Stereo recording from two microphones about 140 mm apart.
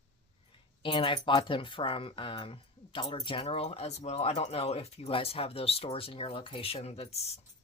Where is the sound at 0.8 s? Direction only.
40° left (ahead or behind).